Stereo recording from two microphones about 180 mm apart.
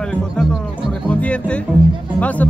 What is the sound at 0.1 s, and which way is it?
Music, 5° left (ahead or behind).